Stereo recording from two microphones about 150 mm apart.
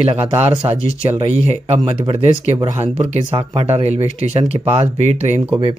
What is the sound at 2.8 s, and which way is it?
Speech, 40° right (ahead or behind).